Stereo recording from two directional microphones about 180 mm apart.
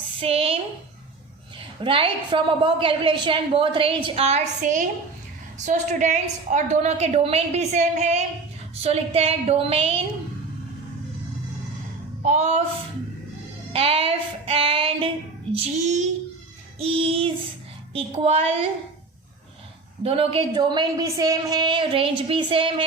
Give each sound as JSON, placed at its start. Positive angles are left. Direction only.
{"t": 0.2, "sound": "a woman's voice", "side_deg": -30}
{"t": 12.2, "sound": "a woman's voice", "side_deg": -40}
{"t": 13.7, "sound": "a woman's voice", "side_deg": -30}
{"t": 20.0, "sound": "a woman's voice", "side_deg": -30}